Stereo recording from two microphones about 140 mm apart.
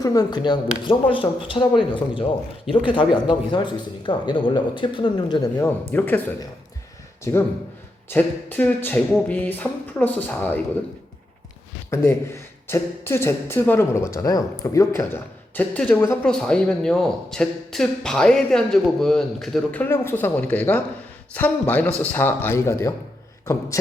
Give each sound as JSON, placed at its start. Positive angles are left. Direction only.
{"t": 0.0, "sound": "speech", "side_deg": 25}
{"t": 5.9, "sound": "speech", "side_deg": 15}
{"t": 7.3, "sound": "speech", "side_deg": 20}
{"t": 11.9, "sound": "speech", "side_deg": 20}
{"t": 19.8, "sound": "speech", "side_deg": 15}